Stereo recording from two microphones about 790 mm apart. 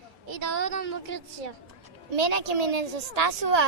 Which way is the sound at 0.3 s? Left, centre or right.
Right.